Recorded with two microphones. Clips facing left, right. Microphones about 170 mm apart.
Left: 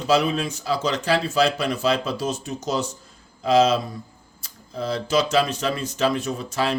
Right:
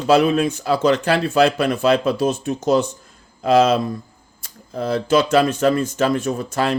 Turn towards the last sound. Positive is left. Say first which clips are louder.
# right 4 dB
turn(degrees=-50)  # may be behind; listen again after turning